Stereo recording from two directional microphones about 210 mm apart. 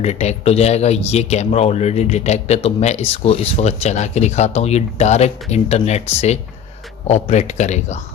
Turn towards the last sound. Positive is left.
turn(degrees=35)  # may be behind; listen again after turning